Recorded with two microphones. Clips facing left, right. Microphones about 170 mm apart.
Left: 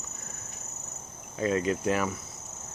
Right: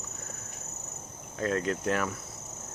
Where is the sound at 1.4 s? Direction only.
5° left (ahead or behind).